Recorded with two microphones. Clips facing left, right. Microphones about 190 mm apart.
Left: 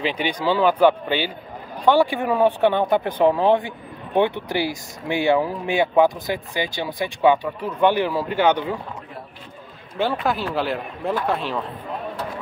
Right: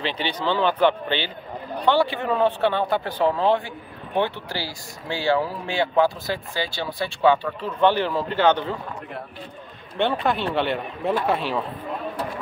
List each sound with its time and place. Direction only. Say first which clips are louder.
0.0 s speech: left 3 dB; 10° left (ahead or behind)
10.0 s speech: even; 5° left (ahead or behind)